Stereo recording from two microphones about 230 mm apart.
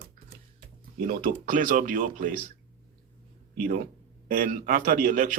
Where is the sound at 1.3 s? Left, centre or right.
Right.